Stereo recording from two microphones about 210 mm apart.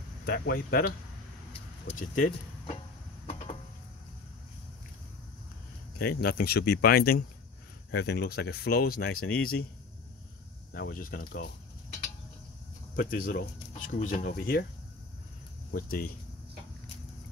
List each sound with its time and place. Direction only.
0.2 s speech: 45° left (ahead or behind)
2.0 s speech: 40° left (ahead or behind)
5.9 s speech: 45° left (ahead or behind)
10.7 s speech: 45° left (ahead or behind)
12.9 s speech: 40° left (ahead or behind)
15.7 s speech: 45° left (ahead or behind)